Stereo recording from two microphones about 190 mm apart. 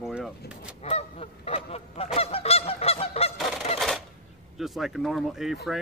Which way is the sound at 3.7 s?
Centre (ahead or behind).